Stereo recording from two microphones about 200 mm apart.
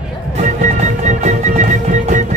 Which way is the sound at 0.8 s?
35° right (ahead or behind).